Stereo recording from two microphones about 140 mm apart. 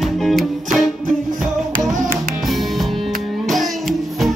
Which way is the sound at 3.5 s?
Centre (ahead or behind).